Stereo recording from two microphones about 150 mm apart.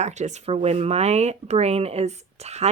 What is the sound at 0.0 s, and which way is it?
A woman's voice, 50° right (ahead or behind).